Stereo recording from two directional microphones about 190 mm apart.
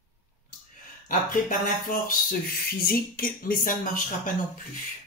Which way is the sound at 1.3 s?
45° left (ahead or behind).